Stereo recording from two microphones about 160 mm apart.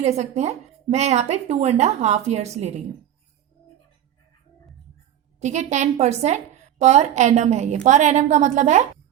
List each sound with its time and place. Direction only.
0.0 s a woman's voice: 45° right (ahead or behind)
5.4 s a woman's voice: 45° right (ahead or behind)